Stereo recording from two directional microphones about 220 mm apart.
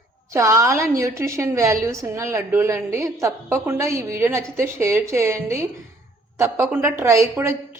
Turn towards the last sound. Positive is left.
turn(degrees=-10)  # may be behind; listen again after turning